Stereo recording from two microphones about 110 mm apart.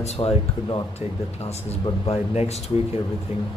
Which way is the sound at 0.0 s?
70° left (ahead or behind).